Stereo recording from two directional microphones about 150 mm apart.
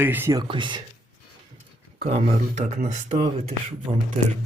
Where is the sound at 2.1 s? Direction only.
50° right (ahead or behind).